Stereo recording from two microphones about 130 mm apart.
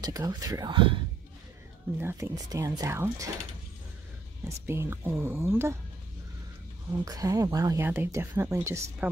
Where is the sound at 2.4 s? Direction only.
25° right (ahead or behind).